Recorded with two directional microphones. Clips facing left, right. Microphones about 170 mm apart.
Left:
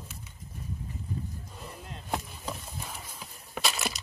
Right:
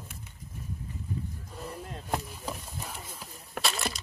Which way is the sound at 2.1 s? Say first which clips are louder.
Right 1 dB; 5° right (ahead or behind).